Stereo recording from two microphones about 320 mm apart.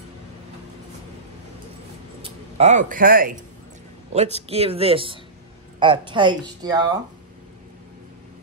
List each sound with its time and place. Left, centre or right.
2.2 s speech: right
4.4 s speech: centre